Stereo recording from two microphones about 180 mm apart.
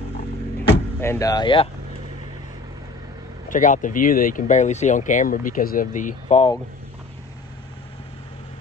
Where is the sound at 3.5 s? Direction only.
45° left (ahead or behind).